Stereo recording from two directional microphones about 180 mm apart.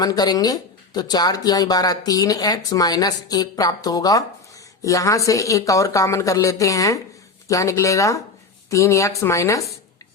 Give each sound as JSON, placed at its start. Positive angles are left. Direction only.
{"t": 0.0, "sound": "speech", "side_deg": 20}